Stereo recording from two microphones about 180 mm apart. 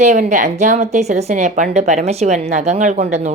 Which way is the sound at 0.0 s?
45° right (ahead or behind).